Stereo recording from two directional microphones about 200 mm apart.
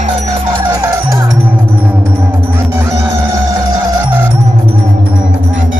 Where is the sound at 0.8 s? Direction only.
15° right (ahead or behind).